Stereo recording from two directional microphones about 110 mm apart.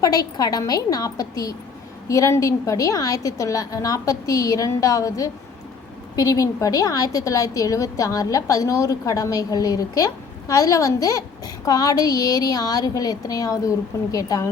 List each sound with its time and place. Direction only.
0.0 s a woman's voice: 35° left (ahead or behind)